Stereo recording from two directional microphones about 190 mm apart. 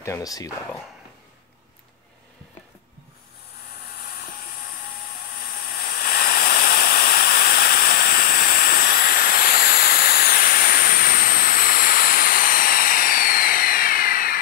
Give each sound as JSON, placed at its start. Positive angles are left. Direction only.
{"t": 0.0, "sound": "speech", "side_deg": 15}
{"t": 3.9, "sound": "a sound", "side_deg": 50}
{"t": 5.3, "sound": "hiss", "side_deg": 50}